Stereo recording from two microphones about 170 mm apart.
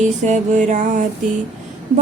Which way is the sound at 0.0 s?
45° right (ahead or behind).